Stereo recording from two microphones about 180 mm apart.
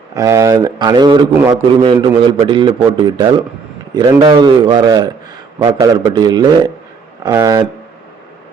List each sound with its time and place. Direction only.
0.2 s a man's voice: 15° right (ahead or behind)